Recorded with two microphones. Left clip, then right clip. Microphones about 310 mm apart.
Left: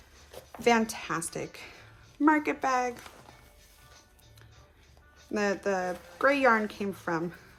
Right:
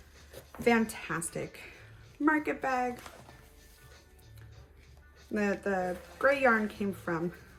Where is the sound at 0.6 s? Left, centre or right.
Centre.